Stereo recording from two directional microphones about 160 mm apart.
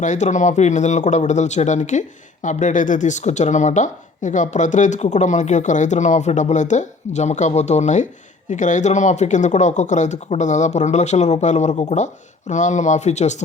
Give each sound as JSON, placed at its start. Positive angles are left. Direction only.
{"t": 0.0, "sound": "speech", "side_deg": 50}